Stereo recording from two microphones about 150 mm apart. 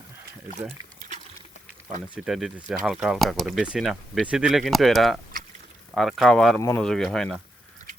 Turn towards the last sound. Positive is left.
turn(degrees=5)  # may be behind; listen again after turning